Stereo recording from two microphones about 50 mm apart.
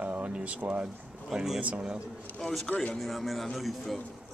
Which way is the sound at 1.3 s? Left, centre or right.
Centre.